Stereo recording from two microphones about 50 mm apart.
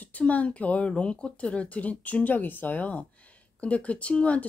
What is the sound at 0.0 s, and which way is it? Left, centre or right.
Speech, left.